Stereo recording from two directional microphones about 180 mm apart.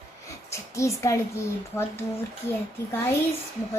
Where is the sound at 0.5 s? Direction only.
15° left (ahead or behind).